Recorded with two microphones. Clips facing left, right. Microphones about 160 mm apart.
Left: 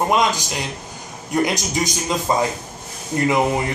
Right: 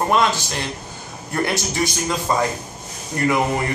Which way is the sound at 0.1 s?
15° left (ahead or behind).